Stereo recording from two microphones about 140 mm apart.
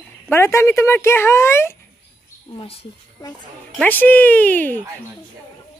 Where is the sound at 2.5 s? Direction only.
40° left (ahead or behind).